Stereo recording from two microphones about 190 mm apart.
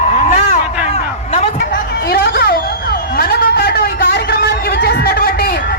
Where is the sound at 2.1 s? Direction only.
55° left (ahead or behind).